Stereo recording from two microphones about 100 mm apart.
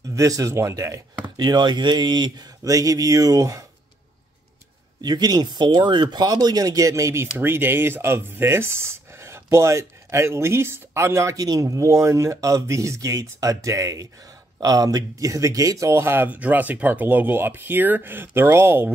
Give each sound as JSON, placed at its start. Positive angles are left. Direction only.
{"t": 0.1, "sound": "speech", "side_deg": -35}
{"t": 1.3, "sound": "speech", "side_deg": -45}
{"t": 5.0, "sound": "speech", "side_deg": -45}